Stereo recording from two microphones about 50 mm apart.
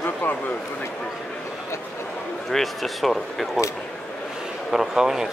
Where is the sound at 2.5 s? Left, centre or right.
Centre.